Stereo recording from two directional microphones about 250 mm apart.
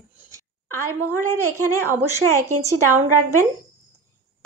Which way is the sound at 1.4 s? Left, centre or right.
Right.